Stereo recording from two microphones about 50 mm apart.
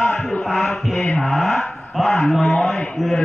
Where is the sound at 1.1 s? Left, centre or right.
Centre.